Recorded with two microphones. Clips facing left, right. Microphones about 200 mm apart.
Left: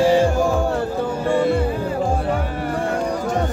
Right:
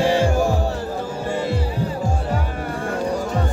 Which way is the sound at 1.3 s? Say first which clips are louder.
Left 6 dB; 55° left (ahead or behind).